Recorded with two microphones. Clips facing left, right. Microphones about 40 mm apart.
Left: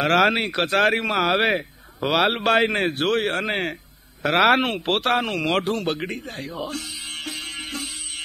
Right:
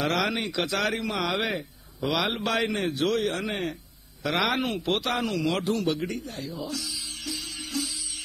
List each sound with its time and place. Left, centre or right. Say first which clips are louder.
0.0 s speech: left 8 dB; left
7.2 s music: left 2 dB; left